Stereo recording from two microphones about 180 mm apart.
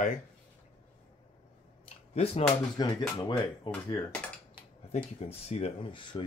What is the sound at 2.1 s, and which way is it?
Speech, 35° left (ahead or behind).